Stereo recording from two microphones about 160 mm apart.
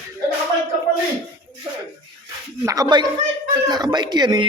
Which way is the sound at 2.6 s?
25° right (ahead or behind).